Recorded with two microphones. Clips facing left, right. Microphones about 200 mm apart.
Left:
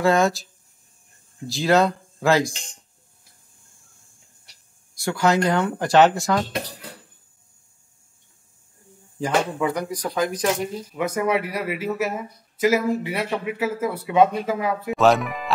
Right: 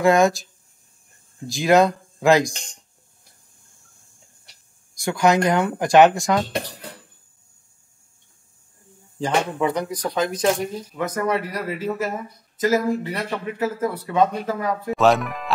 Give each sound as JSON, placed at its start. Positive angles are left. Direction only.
{"t": 0.0, "sound": "speech", "side_deg": -15}
{"t": 1.5, "sound": "speech", "side_deg": -15}
{"t": 5.0, "sound": "speech", "side_deg": -15}
{"t": 9.2, "sound": "speech", "side_deg": -25}
{"t": 11.0, "sound": "speech", "side_deg": 10}